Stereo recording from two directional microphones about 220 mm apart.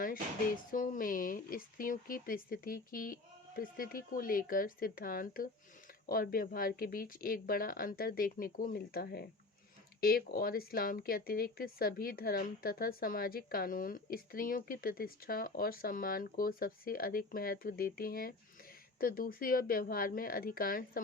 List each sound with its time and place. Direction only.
0.7 s speech: 40° left (ahead or behind)